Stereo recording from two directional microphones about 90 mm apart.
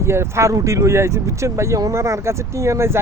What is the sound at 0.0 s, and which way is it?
Speech, 30° right (ahead or behind).